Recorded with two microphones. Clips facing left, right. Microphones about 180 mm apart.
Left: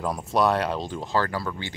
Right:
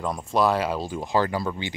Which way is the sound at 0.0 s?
5° left (ahead or behind).